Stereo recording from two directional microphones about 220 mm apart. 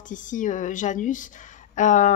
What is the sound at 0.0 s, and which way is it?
Speech, 35° left (ahead or behind).